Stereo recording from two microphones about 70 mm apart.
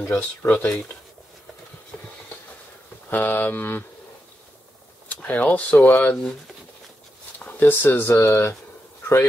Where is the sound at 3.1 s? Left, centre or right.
Left.